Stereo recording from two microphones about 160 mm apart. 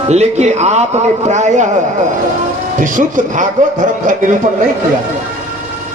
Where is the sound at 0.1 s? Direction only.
45° right (ahead or behind).